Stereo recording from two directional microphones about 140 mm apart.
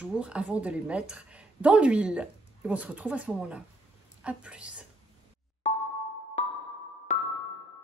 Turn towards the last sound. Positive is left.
turn(degrees=55)  # may be behind; listen again after turning